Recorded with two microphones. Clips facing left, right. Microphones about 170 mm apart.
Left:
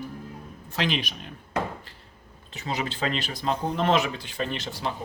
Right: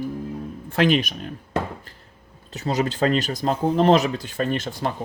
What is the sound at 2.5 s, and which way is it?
Speech, 40° right (ahead or behind).